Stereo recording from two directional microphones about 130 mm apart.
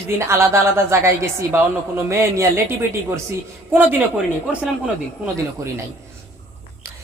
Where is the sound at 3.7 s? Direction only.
15° right (ahead or behind).